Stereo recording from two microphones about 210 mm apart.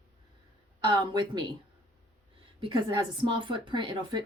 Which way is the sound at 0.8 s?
20° right (ahead or behind).